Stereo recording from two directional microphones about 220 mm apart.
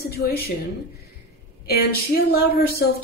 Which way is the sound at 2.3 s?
45° left (ahead or behind).